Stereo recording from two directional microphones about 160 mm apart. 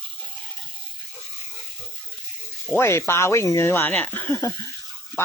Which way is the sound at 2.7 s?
15° left (ahead or behind).